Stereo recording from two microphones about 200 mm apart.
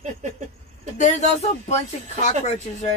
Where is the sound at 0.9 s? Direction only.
35° left (ahead or behind).